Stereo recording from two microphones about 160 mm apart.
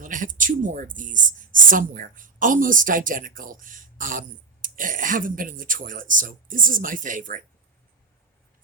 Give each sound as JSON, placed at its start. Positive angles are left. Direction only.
{"t": 0.0, "sound": "speech", "side_deg": -55}